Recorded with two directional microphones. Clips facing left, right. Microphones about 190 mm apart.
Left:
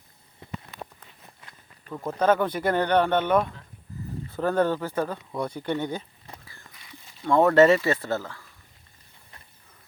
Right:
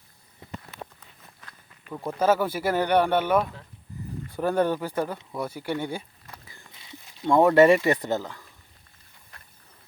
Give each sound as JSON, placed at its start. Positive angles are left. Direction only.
{"t": 1.9, "sound": "speech", "side_deg": -10}
{"t": 7.3, "sound": "speech", "side_deg": -15}